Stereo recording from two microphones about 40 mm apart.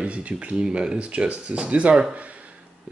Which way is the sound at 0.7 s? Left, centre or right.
Right.